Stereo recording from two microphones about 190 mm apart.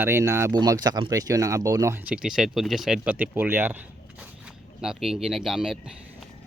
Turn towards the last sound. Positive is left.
turn(degrees=0)  # may be behind; listen again after turning